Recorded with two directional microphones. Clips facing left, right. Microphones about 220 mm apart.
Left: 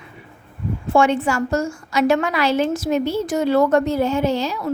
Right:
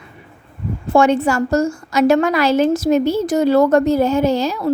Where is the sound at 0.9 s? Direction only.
40° right (ahead or behind).